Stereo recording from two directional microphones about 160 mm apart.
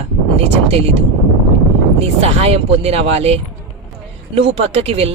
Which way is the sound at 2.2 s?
40° right (ahead or behind).